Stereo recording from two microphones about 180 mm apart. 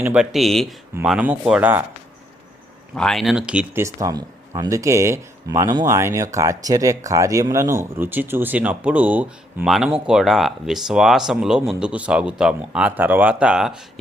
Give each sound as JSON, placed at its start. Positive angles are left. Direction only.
{"t": 0.0, "sound": "speech", "side_deg": -5}
{"t": 2.9, "sound": "speech", "side_deg": 5}